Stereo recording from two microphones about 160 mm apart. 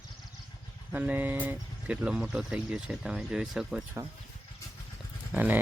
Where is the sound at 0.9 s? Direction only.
10° right (ahead or behind).